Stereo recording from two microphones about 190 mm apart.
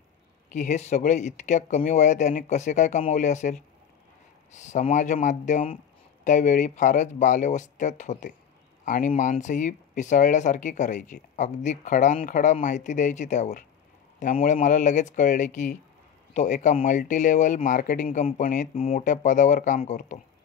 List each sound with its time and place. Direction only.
0.5 s speech: 40° left (ahead or behind)